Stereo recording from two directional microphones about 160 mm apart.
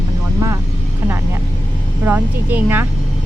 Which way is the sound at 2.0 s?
10° right (ahead or behind).